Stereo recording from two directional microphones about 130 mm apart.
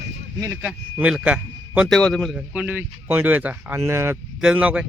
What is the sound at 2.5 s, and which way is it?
Speech, 15° right (ahead or behind).